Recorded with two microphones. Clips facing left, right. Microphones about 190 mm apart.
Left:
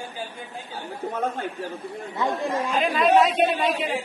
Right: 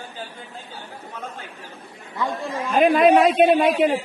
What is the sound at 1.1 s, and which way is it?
Speech, 55° left (ahead or behind).